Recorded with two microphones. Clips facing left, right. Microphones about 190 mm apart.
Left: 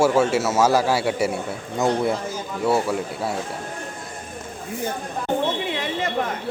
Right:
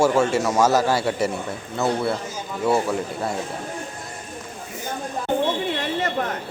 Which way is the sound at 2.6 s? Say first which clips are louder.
Even; 5° left (ahead or behind).